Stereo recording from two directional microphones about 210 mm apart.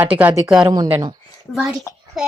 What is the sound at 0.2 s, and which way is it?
Speech, 10° right (ahead or behind).